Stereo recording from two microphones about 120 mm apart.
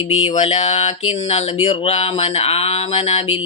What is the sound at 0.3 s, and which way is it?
Speech, 60° left (ahead or behind).